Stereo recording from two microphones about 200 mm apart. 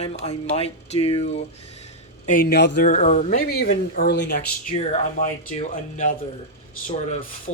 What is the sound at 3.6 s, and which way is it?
Speech, 50° left (ahead or behind).